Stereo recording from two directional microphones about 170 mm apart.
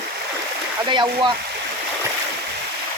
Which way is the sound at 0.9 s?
25° right (ahead or behind).